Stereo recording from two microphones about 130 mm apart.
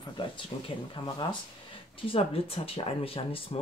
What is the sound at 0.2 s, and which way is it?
Speech, 40° left (ahead or behind).